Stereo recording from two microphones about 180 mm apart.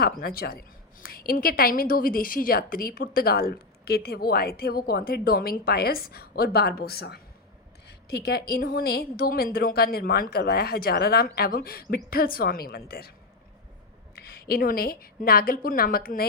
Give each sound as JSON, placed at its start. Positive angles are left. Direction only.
{"t": 0.0, "sound": "speech", "side_deg": 55}
{"t": 14.2, "sound": "a woman's voice", "side_deg": 60}